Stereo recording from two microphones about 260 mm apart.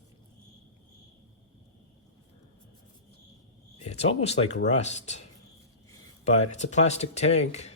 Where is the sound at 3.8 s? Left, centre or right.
Left.